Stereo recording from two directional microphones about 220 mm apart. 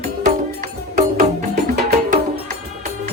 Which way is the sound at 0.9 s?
40° right (ahead or behind).